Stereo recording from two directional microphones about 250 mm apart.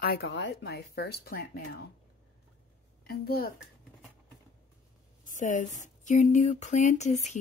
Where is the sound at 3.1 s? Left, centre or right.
Left.